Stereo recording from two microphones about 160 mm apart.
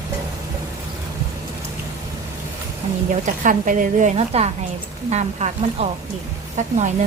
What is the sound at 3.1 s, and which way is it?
A woman's voice, 55° right (ahead or behind).